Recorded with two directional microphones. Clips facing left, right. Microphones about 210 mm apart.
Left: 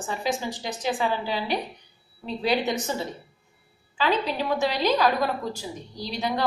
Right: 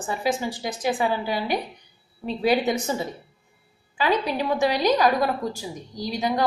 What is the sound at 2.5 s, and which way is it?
Speech, 10° right (ahead or behind).